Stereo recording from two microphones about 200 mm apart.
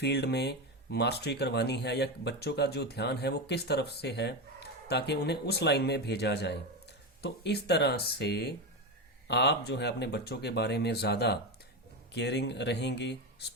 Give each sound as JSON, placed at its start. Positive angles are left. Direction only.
{"t": 0.0, "sound": "speech", "side_deg": 55}